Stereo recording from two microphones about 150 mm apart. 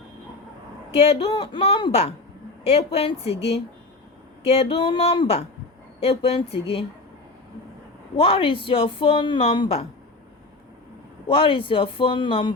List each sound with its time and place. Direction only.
0.9 s a woman's voice: 40° left (ahead or behind)
4.7 s speech: 35° left (ahead or behind)
8.1 s speech: 40° left (ahead or behind)
11.3 s speech: 35° left (ahead or behind)